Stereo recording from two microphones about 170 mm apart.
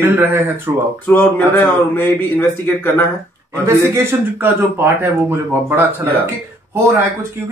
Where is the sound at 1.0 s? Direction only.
10° left (ahead or behind).